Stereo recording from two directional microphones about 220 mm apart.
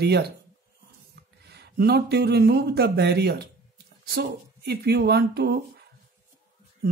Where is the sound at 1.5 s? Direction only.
50° right (ahead or behind).